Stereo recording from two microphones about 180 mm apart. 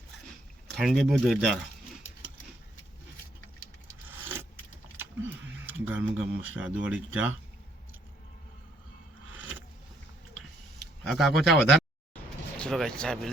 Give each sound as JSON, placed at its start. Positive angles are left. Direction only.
{"t": 0.8, "sound": "speech", "side_deg": 0}
{"t": 4.1, "sound": "keys jangling", "side_deg": -10}
{"t": 5.6, "sound": "speech", "side_deg": -10}
{"t": 10.8, "sound": "speech", "side_deg": 0}